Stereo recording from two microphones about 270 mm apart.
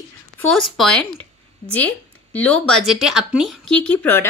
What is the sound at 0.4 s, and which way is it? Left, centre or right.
Speech, centre.